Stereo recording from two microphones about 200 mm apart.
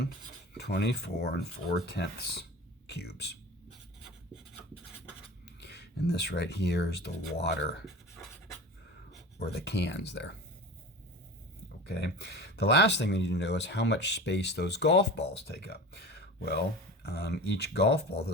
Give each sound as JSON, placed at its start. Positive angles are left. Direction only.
{"t": 0.5, "sound": "speech", "side_deg": 55}
{"t": 5.5, "sound": "speech", "side_deg": 55}
{"t": 9.4, "sound": "speech", "side_deg": 55}
{"t": 11.9, "sound": "speech", "side_deg": 55}